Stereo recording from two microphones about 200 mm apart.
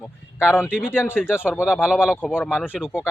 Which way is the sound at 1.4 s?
5° right (ahead or behind).